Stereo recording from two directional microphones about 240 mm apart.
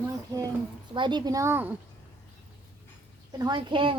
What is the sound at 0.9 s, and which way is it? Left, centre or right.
Speech, centre.